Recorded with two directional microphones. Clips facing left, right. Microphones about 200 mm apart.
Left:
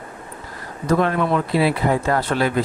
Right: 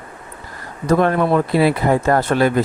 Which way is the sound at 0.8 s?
45° right (ahead or behind).